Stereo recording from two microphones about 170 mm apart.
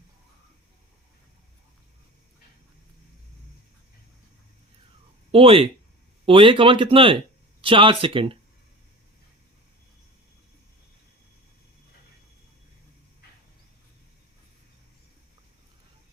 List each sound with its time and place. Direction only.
5.3 s speech: 35° right (ahead or behind)